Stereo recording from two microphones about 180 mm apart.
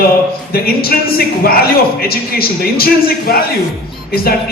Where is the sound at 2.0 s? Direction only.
55° left (ahead or behind).